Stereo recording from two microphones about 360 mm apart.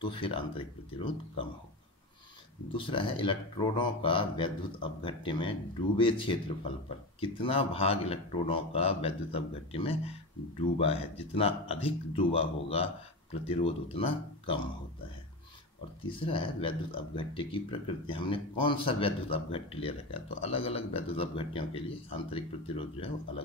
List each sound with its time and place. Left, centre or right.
0.0 s speech: centre
2.7 s speech: centre
16.0 s speech: centre